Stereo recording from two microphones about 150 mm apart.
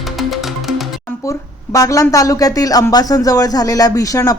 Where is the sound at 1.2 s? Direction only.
20° left (ahead or behind).